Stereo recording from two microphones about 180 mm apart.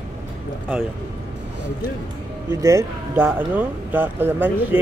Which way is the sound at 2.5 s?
20° right (ahead or behind).